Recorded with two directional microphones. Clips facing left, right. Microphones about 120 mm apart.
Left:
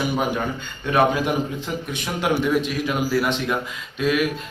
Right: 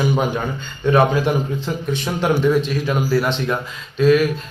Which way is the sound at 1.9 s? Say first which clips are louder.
Right 3 dB; 30° right (ahead or behind).